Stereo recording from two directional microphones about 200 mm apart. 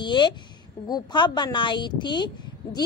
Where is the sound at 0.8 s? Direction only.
20° left (ahead or behind).